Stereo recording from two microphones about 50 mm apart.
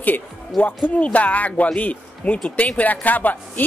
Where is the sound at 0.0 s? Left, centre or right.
Left.